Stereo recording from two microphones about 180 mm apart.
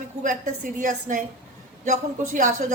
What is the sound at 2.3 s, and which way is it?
Speech, 45° right (ahead or behind).